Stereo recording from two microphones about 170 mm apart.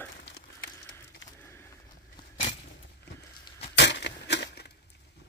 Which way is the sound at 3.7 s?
90° left.